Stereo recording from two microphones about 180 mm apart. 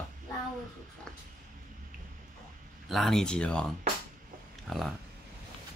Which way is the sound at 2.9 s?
Centre (ahead or behind).